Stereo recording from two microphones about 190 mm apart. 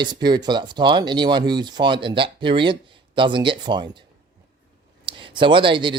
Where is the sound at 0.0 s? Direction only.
20° right (ahead or behind).